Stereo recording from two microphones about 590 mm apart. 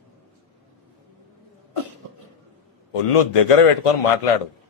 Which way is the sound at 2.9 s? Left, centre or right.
Left.